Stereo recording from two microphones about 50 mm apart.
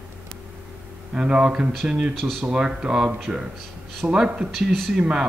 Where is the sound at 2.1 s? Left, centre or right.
Centre.